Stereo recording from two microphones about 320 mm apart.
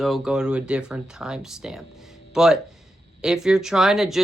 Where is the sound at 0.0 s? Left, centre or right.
Centre.